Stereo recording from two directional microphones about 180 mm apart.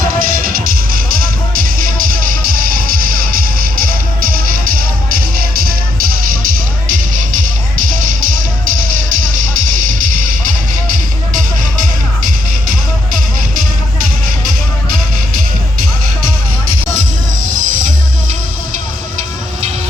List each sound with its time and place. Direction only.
0.2 s music: 50° right (ahead or behind)
6.8 s music: 45° right (ahead or behind)
10.9 s music: 45° right (ahead or behind)